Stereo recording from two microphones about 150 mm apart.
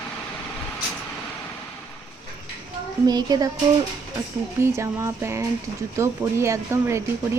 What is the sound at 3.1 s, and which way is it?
Music, 30° right (ahead or behind).